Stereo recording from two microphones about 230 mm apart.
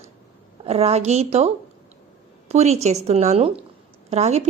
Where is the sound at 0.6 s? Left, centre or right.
Right.